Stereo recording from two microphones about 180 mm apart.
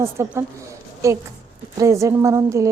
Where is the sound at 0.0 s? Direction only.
15° right (ahead or behind).